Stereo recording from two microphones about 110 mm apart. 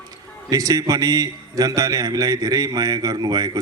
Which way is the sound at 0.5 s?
35° right (ahead or behind).